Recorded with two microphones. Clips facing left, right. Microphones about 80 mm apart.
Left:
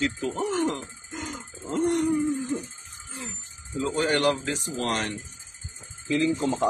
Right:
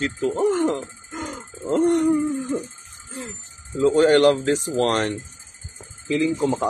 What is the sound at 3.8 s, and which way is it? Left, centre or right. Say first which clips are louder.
Speech: right 9 dB; right.